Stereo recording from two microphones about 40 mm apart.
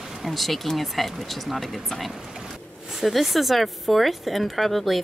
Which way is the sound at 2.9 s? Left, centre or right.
Centre.